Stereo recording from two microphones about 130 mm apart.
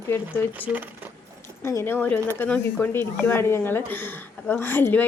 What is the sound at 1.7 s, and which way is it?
Speech, 20° left (ahead or behind).